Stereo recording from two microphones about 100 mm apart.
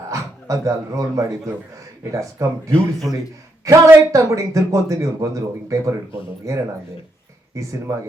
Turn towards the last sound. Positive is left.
turn(degrees=-30)  # may be behind; listen again after turning